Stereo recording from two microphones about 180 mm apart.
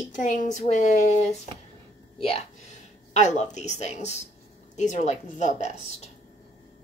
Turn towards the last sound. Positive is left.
turn(degrees=40)  # may be behind; listen again after turning